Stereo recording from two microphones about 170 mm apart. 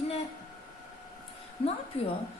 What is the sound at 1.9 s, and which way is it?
Speech, 35° left (ahead or behind).